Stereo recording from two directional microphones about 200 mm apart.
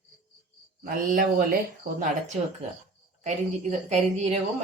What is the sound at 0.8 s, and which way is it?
Speech, 45° right (ahead or behind).